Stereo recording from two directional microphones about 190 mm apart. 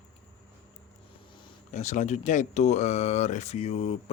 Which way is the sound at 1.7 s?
40° left (ahead or behind).